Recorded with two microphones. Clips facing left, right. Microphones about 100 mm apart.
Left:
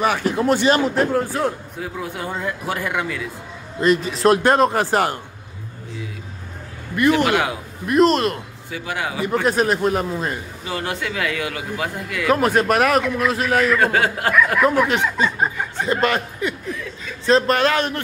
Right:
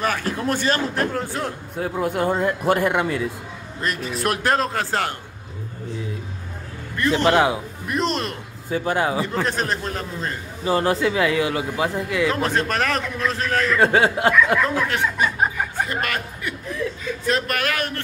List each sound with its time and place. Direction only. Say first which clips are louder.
0.0 s a man's voice: left 4 dB; 10° left (ahead or behind)
1.8 s speech: right 6 dB; 45° right (ahead or behind)
2.9 s speech: right 3 dB; 30° right (ahead or behind)
3.8 s speech: left 8 dB; centre (ahead or behind)
4.2 s speech: left 5 dB; 25° left (ahead or behind)
7.2 s speech: right 3 dB; 25° right (ahead or behind)
7.8 s speech: left 9 dB; centre (ahead or behind)
8.6 s speech: right 6 dB; 40° right (ahead or behind)
9.2 s a man's voice: left 5 dB; 10° left (ahead or behind)
10.6 s speech: right 8 dB; 35° right (ahead or behind)
12.3 s a man's voice: left 5 dB; 10° left (ahead or behind)
13.7 s speech: right 1 dB; 25° right (ahead or behind)
14.6 s speech: left 4 dB; 15° left (ahead or behind)